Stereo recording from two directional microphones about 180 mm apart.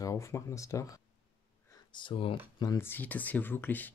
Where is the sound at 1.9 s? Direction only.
25° left (ahead or behind).